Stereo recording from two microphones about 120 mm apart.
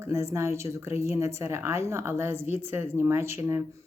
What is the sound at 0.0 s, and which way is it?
A woman's voice, 25° right (ahead or behind).